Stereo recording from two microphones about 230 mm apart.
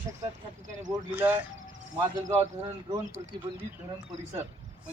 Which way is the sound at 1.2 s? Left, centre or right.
Centre.